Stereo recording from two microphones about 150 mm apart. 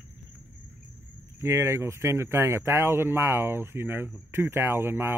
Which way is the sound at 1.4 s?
20° right (ahead or behind).